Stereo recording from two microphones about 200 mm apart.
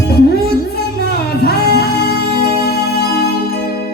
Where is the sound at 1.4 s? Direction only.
50° left (ahead or behind).